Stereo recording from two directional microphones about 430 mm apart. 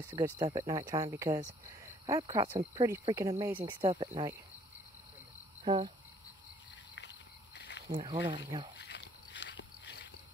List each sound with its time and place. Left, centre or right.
0.1 s speech: centre
5.6 s cricket: centre
7.0 s cricket: left
7.8 s speech: centre
8.7 s biting: left